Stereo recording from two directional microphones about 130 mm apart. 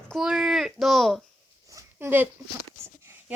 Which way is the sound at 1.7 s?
20° right (ahead or behind).